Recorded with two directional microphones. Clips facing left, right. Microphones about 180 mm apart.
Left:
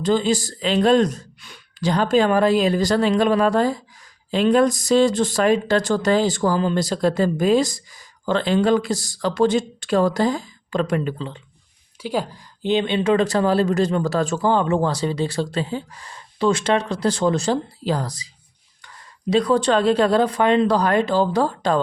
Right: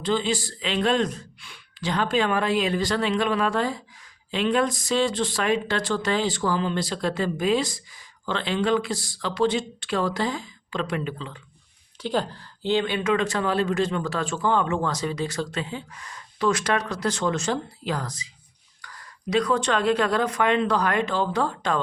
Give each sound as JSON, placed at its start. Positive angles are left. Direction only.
{"t": 0.0, "sound": "speech", "side_deg": 40}
{"t": 12.0, "sound": "speech", "side_deg": 10}
{"t": 18.8, "sound": "speech", "side_deg": 25}